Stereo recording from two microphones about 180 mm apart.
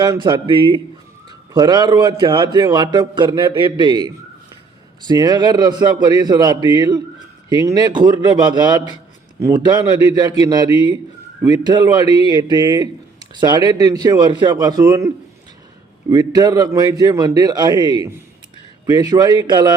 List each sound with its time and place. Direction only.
0.0 s a man's voice: 25° right (ahead or behind)
10.7 s a man's voice: 30° left (ahead or behind)
11.4 s a man's voice: 25° right (ahead or behind)